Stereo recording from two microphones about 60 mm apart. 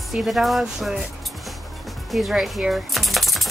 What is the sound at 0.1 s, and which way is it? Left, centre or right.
Speech, centre.